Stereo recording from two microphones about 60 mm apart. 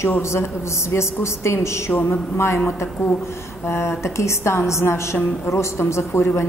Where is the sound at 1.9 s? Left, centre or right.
Left.